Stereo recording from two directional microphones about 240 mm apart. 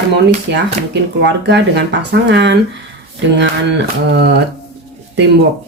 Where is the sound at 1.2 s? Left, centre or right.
Right.